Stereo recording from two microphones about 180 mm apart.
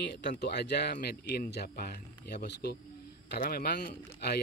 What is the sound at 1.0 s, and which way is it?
A man's voice, 55° left (ahead or behind).